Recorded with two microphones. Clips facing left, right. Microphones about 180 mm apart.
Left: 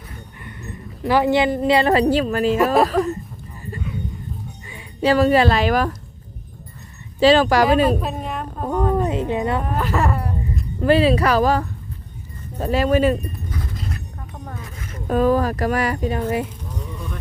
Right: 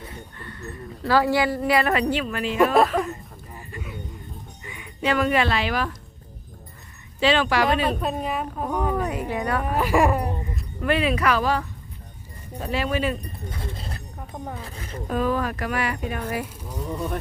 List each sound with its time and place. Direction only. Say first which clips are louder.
0.4 s a woman's voice: left 1 dB; 20° left (ahead or behind); by 2.6 s 40° left (ahead or behind)
2.7 s a woman's voice: left 2 dB; centre (ahead or behind)
4.6 s speech: left 6 dB; 30° left (ahead or behind)
7.2 s speech: left 6 dB; 40° left (ahead or behind)
7.9 s a woman's voice: left 3 dB; centre (ahead or behind)
9.0 s a woman's voice: left 5 dB; 25° left (ahead or behind)
9.6 s speech: right 1 dB; 10° right (ahead or behind)
10.8 s speech: left 7 dB; 30° left (ahead or behind)
13.5 s a sound: left 3 dB; 30° right (ahead or behind)
15.1 s speech: left 7 dB; 40° left (ahead or behind)